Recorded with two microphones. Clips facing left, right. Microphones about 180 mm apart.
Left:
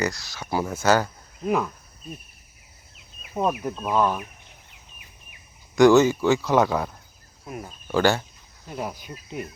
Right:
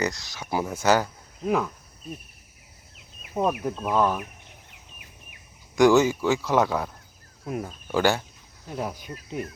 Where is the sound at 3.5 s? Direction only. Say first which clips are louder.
Even; 55° right (ahead or behind).